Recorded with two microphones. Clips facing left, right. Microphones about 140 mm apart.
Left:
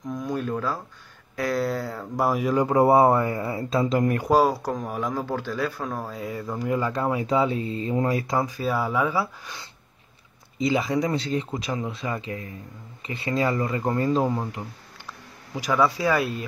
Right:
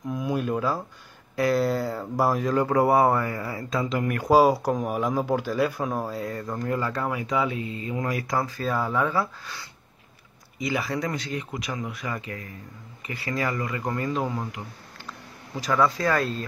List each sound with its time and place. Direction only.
0.0 s a sound: 5° right (ahead or behind)
1.3 s speech: 5° right (ahead or behind)
2.4 s speech: 15° left (ahead or behind); by 4.2 s 35° left (ahead or behind)
4.3 s speech: 10° right (ahead or behind)
6.1 s speech: 5° left (ahead or behind)
10.6 s speech: 20° left (ahead or behind)
15.5 s speech: 10° left (ahead or behind)